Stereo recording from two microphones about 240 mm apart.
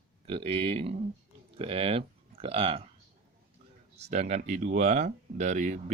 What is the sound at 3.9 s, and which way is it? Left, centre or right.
Speech, right.